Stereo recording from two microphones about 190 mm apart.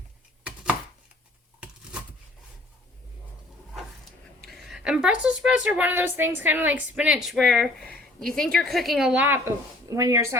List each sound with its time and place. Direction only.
4.4 s a woman's voice: centre (ahead or behind)